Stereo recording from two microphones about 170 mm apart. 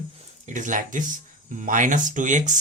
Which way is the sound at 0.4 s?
50° right (ahead or behind).